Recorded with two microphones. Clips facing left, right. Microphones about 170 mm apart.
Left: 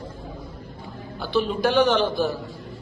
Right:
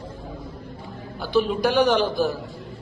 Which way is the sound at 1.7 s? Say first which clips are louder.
Even; centre (ahead or behind).